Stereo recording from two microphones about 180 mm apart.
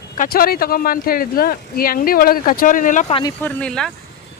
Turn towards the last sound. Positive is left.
turn(degrees=5)  # may be behind; listen again after turning